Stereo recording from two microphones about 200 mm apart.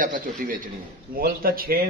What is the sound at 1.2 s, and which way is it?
Speech, 50° right (ahead or behind).